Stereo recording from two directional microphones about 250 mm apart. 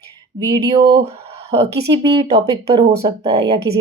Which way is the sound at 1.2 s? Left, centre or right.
Right.